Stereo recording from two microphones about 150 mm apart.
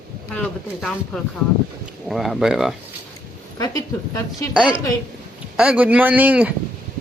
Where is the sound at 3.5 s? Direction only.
25° left (ahead or behind).